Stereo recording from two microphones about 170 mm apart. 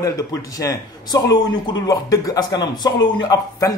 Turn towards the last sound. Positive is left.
turn(degrees=25)  # may be behind; listen again after turning